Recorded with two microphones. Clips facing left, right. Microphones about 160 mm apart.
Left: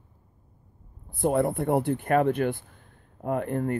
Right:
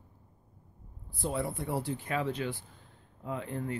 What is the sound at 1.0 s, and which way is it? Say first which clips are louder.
Speech: left 10 dB; 55° left (ahead or behind).